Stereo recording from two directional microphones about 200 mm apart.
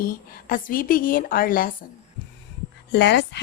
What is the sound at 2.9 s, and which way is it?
Speech, 55° left (ahead or behind).